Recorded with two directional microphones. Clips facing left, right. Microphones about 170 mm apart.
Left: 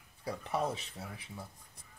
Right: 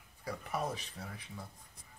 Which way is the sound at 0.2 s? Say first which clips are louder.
Left 3 dB; 30° left (ahead or behind).